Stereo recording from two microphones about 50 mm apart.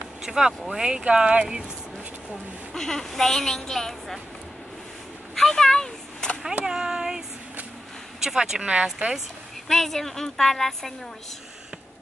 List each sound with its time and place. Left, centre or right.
0.2 s speech: centre
2.7 s a woman's voice: centre
5.3 s a sound: centre
6.6 s speech: centre
9.7 s a woman's voice: centre